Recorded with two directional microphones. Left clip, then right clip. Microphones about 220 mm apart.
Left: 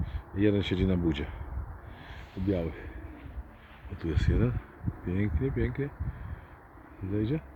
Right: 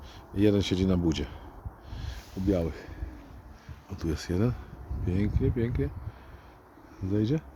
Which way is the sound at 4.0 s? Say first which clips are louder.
Right 1 dB; 20° right (ahead or behind).